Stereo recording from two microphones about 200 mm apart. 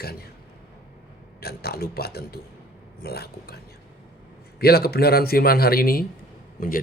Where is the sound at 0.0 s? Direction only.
50° left (ahead or behind).